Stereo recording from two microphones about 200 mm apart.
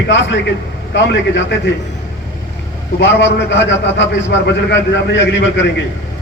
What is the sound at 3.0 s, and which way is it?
A man's voice, 65° left (ahead or behind).